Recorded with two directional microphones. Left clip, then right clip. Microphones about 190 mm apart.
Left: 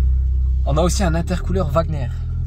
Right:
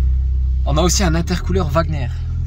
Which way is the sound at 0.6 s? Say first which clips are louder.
Right 2 dB; 10° left (ahead or behind).